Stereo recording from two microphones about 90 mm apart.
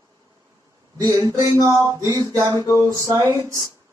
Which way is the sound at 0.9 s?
40° right (ahead or behind).